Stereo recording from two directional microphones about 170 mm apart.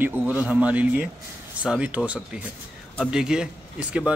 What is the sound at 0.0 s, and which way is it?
A man's voice, 10° right (ahead or behind).